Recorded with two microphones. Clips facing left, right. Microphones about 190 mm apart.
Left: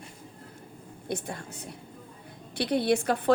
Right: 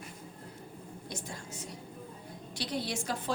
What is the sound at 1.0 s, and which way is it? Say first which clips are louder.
A woman's voice: left 10 dB; 60° left (ahead or behind).